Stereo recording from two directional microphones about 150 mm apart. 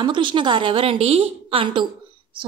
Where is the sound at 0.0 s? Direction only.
30° right (ahead or behind).